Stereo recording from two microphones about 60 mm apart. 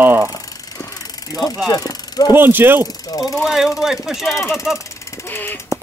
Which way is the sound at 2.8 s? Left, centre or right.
Left.